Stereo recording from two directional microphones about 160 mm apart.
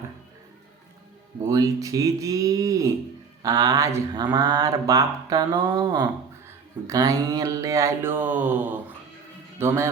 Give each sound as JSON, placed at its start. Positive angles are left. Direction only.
{"t": 1.4, "sound": "speech", "side_deg": -20}